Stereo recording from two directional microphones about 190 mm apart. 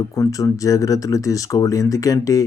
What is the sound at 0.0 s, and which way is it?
Speech, 15° left (ahead or behind).